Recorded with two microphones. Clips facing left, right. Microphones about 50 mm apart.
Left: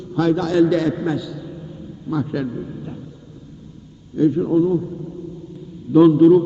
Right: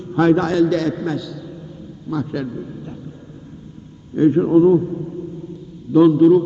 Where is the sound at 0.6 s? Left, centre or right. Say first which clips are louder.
Left 1 dB; centre.